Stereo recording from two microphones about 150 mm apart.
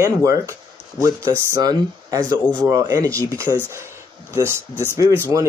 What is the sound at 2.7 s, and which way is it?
Speech, 25° right (ahead or behind).